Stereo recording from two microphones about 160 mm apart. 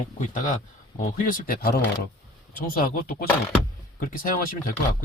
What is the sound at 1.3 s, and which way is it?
Speech, 65° left (ahead or behind).